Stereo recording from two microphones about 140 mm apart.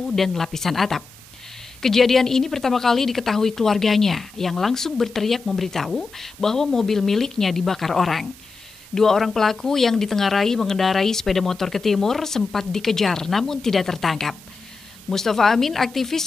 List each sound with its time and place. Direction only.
0.1 s a woman's voice: centre (ahead or behind)